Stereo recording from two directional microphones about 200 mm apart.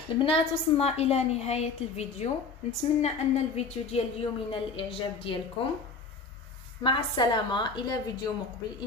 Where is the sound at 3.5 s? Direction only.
30° left (ahead or behind).